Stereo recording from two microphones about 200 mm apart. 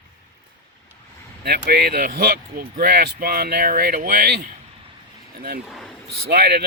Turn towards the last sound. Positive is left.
turn(degrees=-55)  # may be behind; listen again after turning